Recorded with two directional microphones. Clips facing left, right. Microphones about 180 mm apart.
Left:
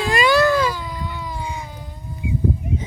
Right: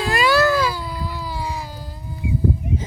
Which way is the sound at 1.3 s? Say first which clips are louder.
Right 2 dB; 5° right (ahead or behind).